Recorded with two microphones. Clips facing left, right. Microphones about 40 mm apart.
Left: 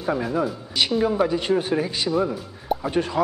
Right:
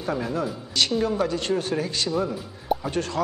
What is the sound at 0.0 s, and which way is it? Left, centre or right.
Speech, centre.